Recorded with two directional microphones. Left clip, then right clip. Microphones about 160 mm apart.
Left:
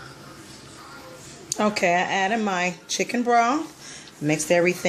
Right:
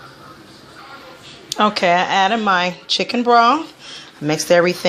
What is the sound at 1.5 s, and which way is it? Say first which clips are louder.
A woman's voice: right 6 dB; 5° right (ahead or behind).